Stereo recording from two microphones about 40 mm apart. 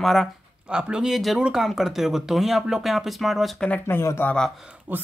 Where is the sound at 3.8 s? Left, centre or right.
Left.